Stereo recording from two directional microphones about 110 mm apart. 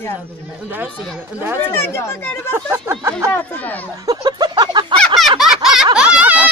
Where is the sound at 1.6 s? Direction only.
20° left (ahead or behind).